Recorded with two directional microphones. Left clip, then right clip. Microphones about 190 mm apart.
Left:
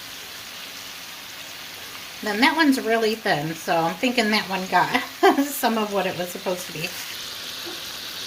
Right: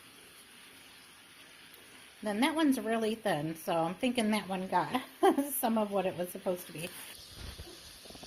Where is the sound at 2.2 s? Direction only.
40° right (ahead or behind).